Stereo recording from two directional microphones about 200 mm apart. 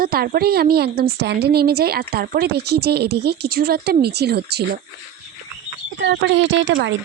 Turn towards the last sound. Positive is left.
turn(degrees=-65)  # may be behind; listen again after turning